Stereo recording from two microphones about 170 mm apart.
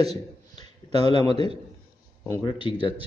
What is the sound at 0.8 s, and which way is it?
Speech, 35° right (ahead or behind).